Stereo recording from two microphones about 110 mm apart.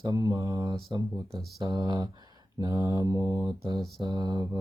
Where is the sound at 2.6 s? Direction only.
40° right (ahead or behind).